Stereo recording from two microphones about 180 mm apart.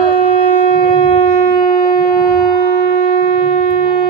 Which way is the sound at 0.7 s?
50° left (ahead or behind).